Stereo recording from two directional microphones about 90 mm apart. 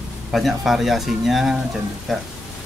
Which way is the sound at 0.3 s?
Centre (ahead or behind).